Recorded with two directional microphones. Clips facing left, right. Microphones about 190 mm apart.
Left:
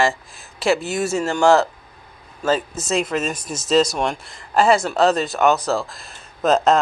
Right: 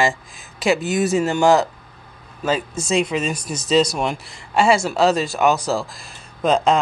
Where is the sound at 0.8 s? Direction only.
Centre (ahead or behind).